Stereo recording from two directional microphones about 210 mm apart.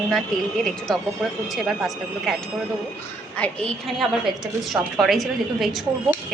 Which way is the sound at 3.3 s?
5° left (ahead or behind).